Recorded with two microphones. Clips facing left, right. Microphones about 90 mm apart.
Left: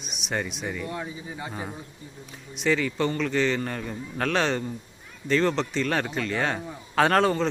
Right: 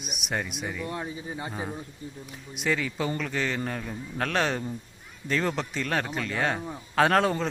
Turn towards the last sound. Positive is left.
turn(degrees=0)  # may be behind; listen again after turning